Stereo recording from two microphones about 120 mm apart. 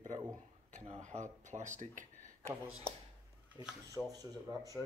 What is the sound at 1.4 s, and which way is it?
Speech, 90° right.